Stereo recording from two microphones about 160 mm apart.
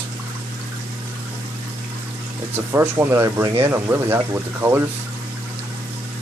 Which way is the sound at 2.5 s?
15° right (ahead or behind).